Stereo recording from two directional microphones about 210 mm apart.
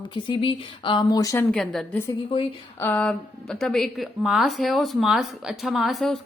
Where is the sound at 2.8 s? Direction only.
10° left (ahead or behind).